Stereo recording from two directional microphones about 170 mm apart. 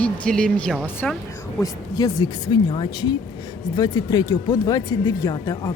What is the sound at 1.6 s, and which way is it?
A woman's voice, 25° left (ahead or behind).